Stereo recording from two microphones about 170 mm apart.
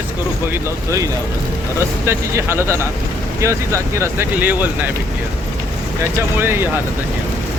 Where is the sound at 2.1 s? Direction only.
15° right (ahead or behind).